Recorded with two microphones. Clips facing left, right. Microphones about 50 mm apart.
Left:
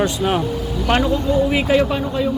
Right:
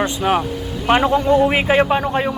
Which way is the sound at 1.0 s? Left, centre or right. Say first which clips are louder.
Right 3 dB; right.